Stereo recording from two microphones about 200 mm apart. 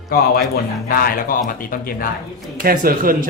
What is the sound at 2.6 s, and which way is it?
Speech, 45° right (ahead or behind).